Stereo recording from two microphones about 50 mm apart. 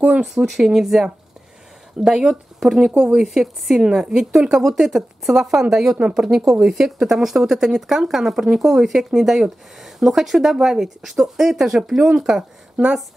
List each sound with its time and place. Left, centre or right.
0.0 s a sound: right
0.3 s speech: centre
2.9 s speech: right
3.2 s speech: centre